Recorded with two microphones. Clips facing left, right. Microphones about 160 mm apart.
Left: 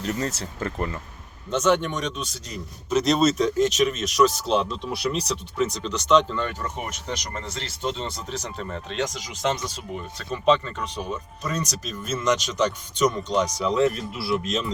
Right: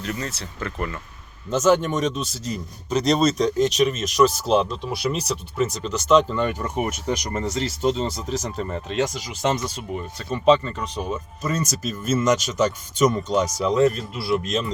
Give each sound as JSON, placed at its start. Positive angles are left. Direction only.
{"t": 0.0, "sound": "speech", "side_deg": 35}
{"t": 1.5, "sound": "speech", "side_deg": -5}